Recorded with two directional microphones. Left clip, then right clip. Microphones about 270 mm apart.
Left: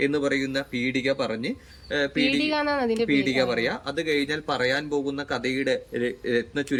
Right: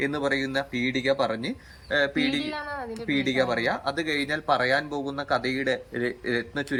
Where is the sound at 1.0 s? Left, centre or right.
Centre.